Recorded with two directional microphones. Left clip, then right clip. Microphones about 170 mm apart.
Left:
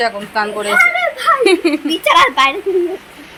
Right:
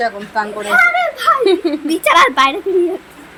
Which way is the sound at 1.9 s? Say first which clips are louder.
Right 1 dB; 60° right (ahead or behind).